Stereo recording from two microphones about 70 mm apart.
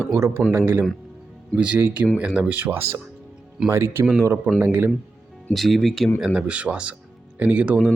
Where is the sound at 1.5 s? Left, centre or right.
Centre.